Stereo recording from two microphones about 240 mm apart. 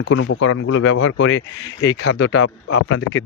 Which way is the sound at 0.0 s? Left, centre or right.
Left.